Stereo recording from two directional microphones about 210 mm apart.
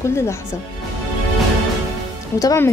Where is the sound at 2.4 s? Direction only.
15° left (ahead or behind).